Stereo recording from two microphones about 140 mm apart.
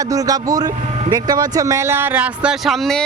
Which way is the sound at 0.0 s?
25° right (ahead or behind).